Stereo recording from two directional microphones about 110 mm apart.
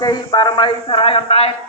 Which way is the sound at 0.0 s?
40° left (ahead or behind).